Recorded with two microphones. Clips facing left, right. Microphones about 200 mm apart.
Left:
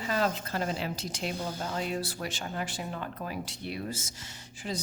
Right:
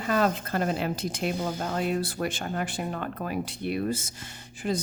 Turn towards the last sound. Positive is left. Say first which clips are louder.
# right 7 dB
turn(degrees=-55)  # may be behind; listen again after turning